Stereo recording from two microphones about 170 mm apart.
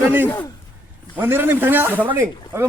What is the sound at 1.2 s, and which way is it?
Speech, 15° right (ahead or behind).